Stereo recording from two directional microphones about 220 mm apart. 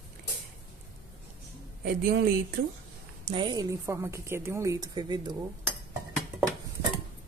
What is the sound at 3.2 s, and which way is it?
A woman's voice, 20° right (ahead or behind).